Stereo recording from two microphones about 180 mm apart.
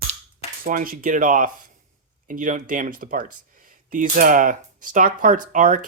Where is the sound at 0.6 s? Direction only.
50° right (ahead or behind).